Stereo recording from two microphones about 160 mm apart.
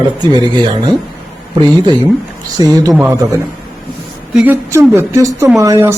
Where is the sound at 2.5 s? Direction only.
25° right (ahead or behind).